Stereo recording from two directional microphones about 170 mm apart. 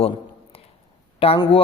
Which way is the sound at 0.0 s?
35° left (ahead or behind).